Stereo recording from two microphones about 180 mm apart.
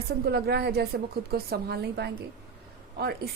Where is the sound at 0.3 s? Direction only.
65° right (ahead or behind).